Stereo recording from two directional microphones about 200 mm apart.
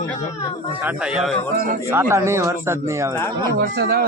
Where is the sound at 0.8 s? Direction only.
5° right (ahead or behind).